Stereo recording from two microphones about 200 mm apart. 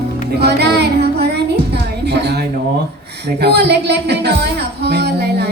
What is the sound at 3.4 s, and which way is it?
Music, 55° right (ahead or behind).